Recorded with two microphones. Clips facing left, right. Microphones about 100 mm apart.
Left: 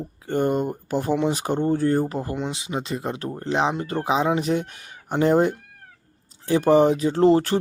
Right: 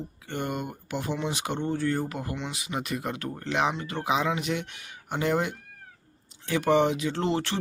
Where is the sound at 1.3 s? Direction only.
40° left (ahead or behind).